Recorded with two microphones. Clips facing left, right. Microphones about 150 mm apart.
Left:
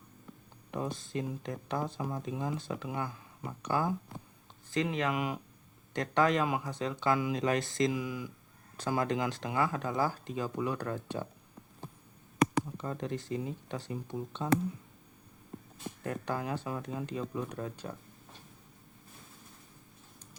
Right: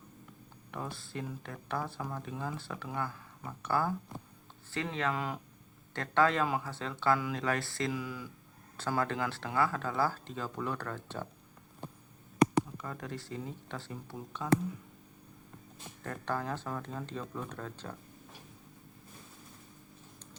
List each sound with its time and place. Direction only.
0.7 s speech: 20° left (ahead or behind)
12.7 s speech: 30° left (ahead or behind)
16.0 s speech: 15° left (ahead or behind)